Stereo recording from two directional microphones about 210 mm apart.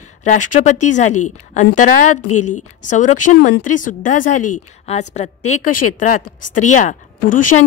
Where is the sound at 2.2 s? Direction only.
90° left.